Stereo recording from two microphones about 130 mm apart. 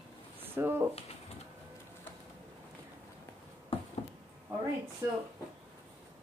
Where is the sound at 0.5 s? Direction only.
15° right (ahead or behind).